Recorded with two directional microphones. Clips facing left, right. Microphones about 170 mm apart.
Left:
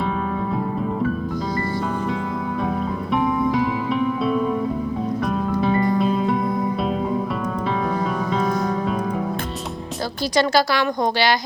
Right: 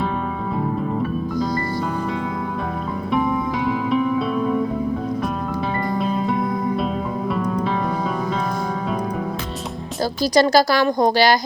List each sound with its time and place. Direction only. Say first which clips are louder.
3.1 s music: left 1 dB; centre (ahead or behind)
5.6 s music: left 4 dB; centre (ahead or behind)
10.3 s a woman's voice: right 3 dB; 40° right (ahead or behind)